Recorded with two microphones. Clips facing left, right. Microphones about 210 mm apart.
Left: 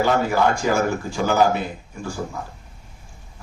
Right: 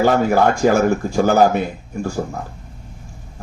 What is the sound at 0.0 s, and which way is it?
A man's voice, 50° right (ahead or behind).